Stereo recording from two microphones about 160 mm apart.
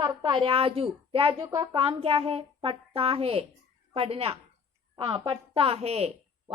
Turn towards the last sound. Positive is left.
turn(degrees=-40)  # may be behind; listen again after turning